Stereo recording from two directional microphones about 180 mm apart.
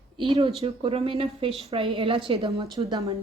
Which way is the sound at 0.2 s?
30° right (ahead or behind).